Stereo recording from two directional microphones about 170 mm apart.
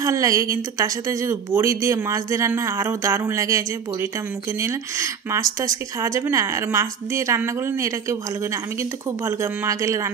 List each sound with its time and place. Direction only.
0.0 s a woman's voice: 20° right (ahead or behind)